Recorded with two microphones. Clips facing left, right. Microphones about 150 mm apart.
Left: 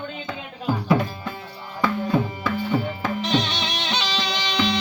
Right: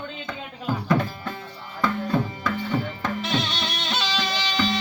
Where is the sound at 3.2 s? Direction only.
5° right (ahead or behind).